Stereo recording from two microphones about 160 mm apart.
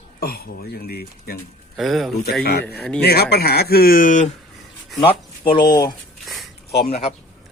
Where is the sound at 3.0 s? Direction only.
80° left; by 4.3 s 50° left (ahead or behind).